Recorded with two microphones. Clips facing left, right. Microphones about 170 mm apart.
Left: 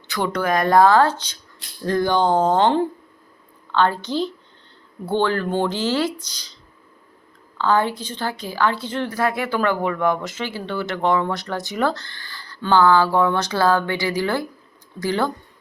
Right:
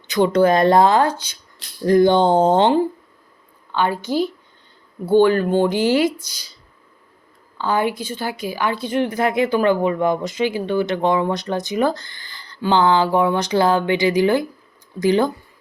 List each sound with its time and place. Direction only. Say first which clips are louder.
0.1 s speech: right 7 dB; 20° right (ahead or behind)
3.7 s a woman's voice: even; 10° right (ahead or behind)
7.6 s a woman's voice: even; 10° right (ahead or behind)